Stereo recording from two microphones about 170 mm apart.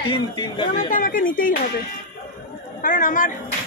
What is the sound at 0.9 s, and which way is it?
Speech, 55° left (ahead or behind).